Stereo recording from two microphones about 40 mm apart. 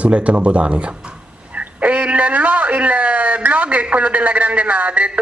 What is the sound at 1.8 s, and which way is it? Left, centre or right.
A man's voice, right.